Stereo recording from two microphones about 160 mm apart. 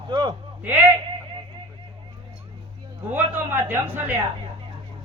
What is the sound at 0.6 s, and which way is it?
Speech, 10° right (ahead or behind).